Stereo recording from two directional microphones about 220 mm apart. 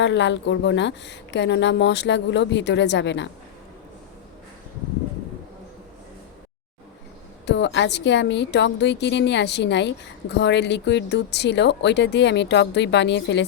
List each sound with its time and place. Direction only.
0.0 s a woman's voice: 55° left (ahead or behind)
7.4 s a woman's voice: 50° left (ahead or behind)